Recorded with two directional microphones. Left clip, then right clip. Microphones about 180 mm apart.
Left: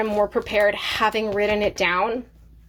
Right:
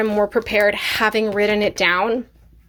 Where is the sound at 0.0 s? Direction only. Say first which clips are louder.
Right 3 dB; 20° right (ahead or behind).